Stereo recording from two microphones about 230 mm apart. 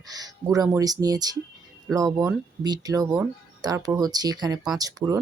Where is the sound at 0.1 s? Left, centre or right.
Centre.